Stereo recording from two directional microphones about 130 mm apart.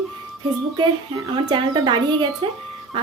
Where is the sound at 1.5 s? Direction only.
35° right (ahead or behind).